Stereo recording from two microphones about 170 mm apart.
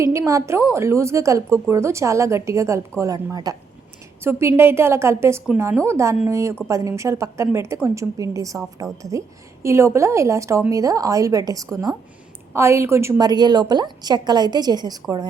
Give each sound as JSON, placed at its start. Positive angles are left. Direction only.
{"t": 0.0, "sound": "a woman's voice", "side_deg": -15}